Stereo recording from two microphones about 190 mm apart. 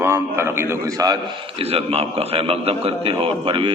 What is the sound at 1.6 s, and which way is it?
A man's voice, 30° right (ahead or behind).